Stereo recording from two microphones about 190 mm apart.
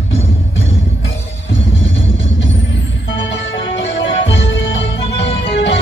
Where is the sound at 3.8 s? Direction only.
80° left.